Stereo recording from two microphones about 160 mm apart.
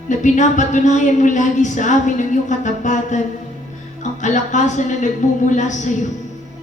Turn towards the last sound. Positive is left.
turn(degrees=50)  # may be behind; listen again after turning